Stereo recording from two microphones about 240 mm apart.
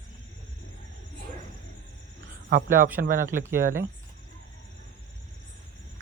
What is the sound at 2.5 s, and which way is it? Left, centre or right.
Speech, right.